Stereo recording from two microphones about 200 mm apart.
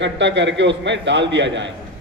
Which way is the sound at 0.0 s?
65° right (ahead or behind).